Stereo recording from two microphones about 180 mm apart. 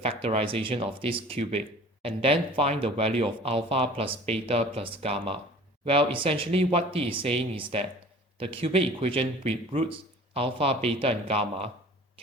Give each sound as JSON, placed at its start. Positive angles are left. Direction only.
{"t": 0.0, "sound": "speech", "side_deg": -35}